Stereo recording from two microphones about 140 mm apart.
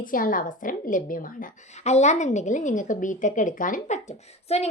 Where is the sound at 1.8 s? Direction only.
55° left (ahead or behind).